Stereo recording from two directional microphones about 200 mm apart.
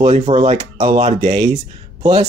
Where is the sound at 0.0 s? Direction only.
30° right (ahead or behind).